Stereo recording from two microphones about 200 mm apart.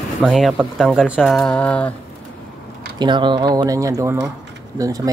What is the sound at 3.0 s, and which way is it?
Speech, 25° right (ahead or behind).